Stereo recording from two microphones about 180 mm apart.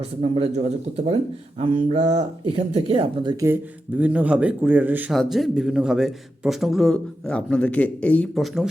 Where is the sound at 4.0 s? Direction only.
10° right (ahead or behind).